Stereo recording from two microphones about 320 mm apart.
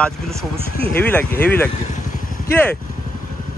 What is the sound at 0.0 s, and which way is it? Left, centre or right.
Speech, centre.